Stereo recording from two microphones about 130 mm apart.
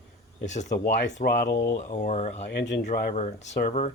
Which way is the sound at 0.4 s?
65° left (ahead or behind).